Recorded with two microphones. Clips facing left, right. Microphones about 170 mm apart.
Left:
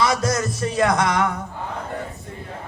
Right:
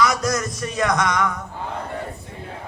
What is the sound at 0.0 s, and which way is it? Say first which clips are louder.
Music: even; 30° left (ahead or behind).